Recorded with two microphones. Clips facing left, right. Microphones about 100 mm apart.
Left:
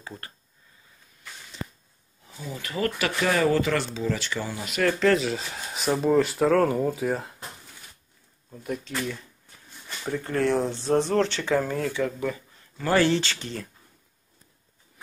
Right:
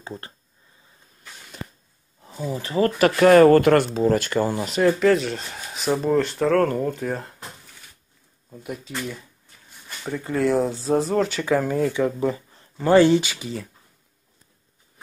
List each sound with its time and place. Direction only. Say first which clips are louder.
0.0 s speech: right 5 dB; 25° right (ahead or behind)
2.5 s speech: right 7 dB; 30° right (ahead or behind)
3.0 s speech: right 12 dB; 55° right (ahead or behind)
5.0 s speech: right 3 dB; centre (ahead or behind)
8.5 s speech: left 1 dB; 5° right (ahead or behind)